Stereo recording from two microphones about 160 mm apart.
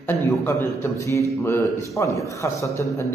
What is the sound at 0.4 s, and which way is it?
A man's voice, 15° left (ahead or behind).